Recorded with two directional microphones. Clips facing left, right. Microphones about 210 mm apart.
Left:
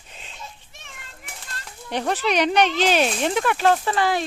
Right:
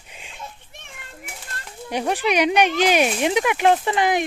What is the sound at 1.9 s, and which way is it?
Speech, 10° right (ahead or behind).